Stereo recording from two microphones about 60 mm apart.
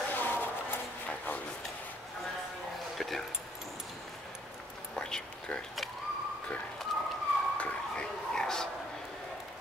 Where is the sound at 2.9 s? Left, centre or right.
Centre.